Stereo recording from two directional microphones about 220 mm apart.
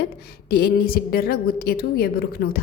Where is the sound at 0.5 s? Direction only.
45° left (ahead or behind).